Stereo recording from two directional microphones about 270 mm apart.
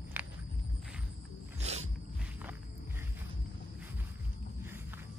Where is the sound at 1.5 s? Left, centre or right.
Right.